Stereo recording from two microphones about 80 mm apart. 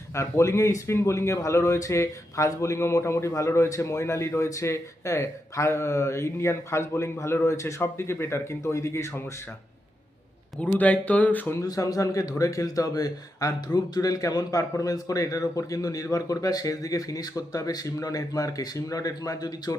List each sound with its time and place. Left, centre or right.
0.1 s a man's voice: left
10.6 s speech: centre
11.6 s a man's voice: left